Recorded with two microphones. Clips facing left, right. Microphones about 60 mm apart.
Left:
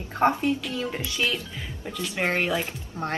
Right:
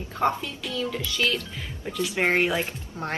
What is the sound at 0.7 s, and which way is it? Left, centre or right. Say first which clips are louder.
Music: right 1 dB; left.